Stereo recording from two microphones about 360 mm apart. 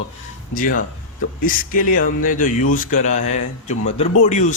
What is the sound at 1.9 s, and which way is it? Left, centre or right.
Speech, left.